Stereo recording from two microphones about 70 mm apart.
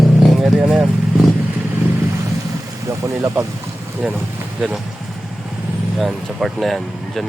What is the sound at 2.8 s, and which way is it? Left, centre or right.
Speech, right.